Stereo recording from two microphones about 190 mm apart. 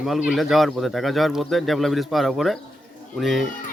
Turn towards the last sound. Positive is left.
turn(degrees=0)  # may be behind; listen again after turning